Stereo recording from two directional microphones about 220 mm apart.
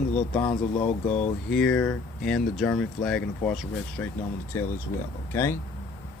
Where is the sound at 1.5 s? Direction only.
5° left (ahead or behind).